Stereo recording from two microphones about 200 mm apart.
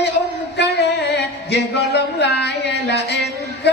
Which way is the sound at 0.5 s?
60° left (ahead or behind).